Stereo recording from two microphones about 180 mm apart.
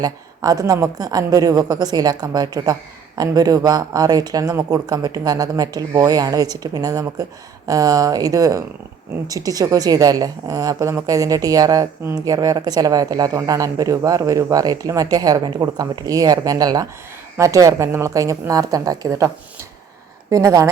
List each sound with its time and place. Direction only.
0.0 s a woman's voice: 20° right (ahead or behind)
20.3 s a woman's voice: 20° right (ahead or behind)